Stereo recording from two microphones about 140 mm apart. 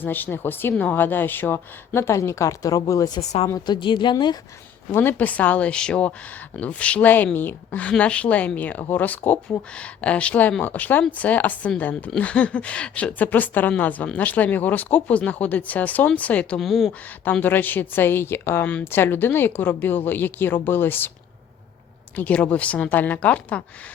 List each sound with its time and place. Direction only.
0.0 s speech: 15° left (ahead or behind)
3.2 s a woman's voice: 45° left (ahead or behind)
3.5 s a woman's voice: 35° left (ahead or behind)
4.9 s speech: 15° left (ahead or behind)
17.2 s speech: 15° left (ahead or behind)
22.1 s speech: 10° left (ahead or behind)